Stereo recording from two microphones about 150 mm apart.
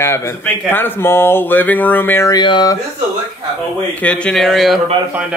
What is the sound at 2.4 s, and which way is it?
Speech, 30° left (ahead or behind).